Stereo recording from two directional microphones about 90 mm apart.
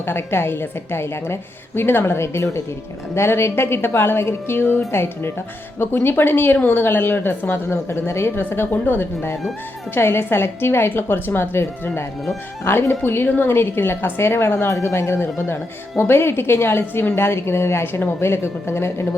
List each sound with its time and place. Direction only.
0.0 s a woman's voice: 25° left (ahead or behind)